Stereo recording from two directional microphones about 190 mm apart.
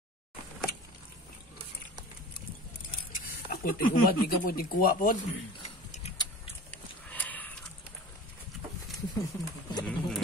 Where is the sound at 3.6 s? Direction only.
50° left (ahead or behind).